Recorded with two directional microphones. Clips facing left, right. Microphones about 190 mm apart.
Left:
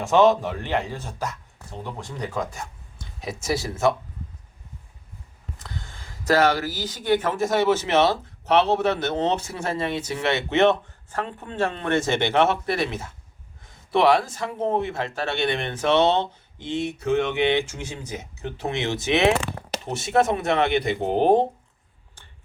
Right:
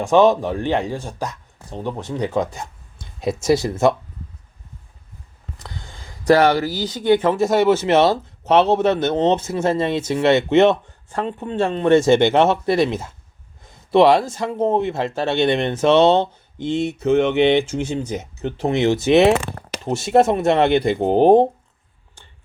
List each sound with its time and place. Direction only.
0.0 s speech: 15° right (ahead or behind)
6.6 s speech: 30° right (ahead or behind)
8.1 s speech: 45° right (ahead or behind)
8.7 s speech: 20° right (ahead or behind); by 19.2 s 40° right (ahead or behind)
19.8 s speech: 30° right (ahead or behind)